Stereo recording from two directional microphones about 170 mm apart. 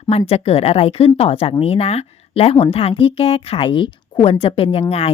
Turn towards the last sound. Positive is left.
turn(degrees=35)  # may be behind; listen again after turning